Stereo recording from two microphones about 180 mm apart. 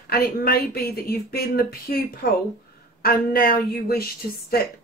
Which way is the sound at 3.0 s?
55° left (ahead or behind).